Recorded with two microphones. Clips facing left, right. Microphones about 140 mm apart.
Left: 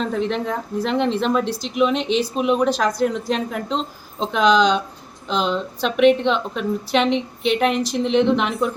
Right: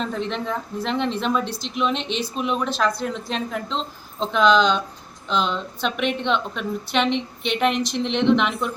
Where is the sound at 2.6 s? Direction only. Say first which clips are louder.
Left 4 dB; 40° left (ahead or behind).